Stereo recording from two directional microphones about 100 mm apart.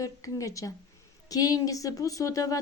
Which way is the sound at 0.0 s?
35° left (ahead or behind).